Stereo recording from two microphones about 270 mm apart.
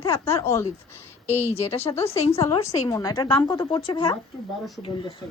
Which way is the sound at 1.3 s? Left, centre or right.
Left.